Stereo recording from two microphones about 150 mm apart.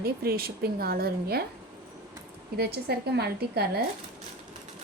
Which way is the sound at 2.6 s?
90° right.